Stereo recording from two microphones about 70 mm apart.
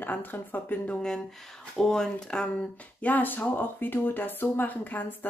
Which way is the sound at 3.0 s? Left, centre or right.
Left.